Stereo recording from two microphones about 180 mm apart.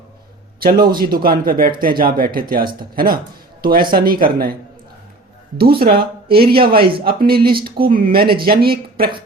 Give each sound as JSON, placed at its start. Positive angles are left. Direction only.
{"t": 0.9, "sound": "speech", "side_deg": -55}
{"t": 5.5, "sound": "speech", "side_deg": -60}